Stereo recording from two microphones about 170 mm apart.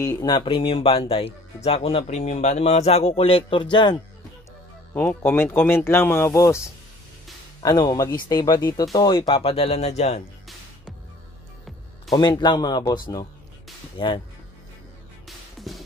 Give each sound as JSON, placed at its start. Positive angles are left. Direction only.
{"t": 0.0, "sound": "speech", "side_deg": 20}
{"t": 4.9, "sound": "speech", "side_deg": 15}
{"t": 12.1, "sound": "speech", "side_deg": 25}
{"t": 15.2, "sound": "music", "side_deg": 0}